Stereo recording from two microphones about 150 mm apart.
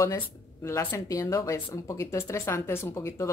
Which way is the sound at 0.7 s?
20° left (ahead or behind).